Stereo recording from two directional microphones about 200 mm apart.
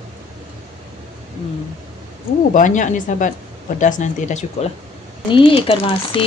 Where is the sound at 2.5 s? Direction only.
40° left (ahead or behind).